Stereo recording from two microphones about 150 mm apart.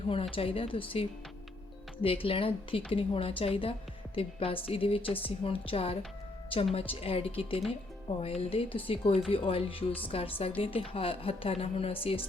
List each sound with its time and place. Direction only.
0.1 s speech: 35° left (ahead or behind)